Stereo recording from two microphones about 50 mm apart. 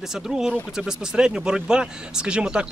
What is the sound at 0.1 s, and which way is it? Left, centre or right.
Speech, centre.